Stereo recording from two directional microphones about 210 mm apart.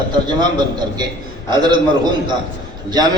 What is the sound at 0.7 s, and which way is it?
A man's voice, 20° right (ahead or behind).